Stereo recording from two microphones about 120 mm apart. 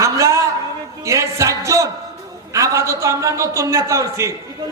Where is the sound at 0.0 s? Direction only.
25° right (ahead or behind).